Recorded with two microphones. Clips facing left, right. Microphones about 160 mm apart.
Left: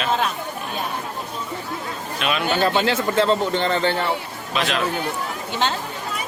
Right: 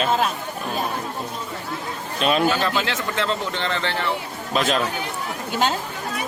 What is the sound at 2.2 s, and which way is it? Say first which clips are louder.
Speech: right 4 dB; 35° right (ahead or behind).